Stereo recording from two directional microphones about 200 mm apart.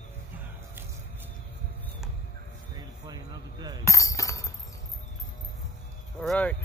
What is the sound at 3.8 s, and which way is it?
Music, 15° left (ahead or behind).